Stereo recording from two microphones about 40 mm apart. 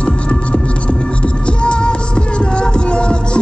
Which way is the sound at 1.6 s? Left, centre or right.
Left.